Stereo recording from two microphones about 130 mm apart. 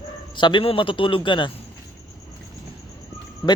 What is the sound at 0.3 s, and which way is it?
A man's voice, 40° left (ahead or behind).